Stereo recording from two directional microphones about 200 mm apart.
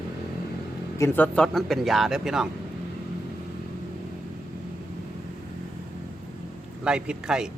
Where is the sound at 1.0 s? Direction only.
10° left (ahead or behind).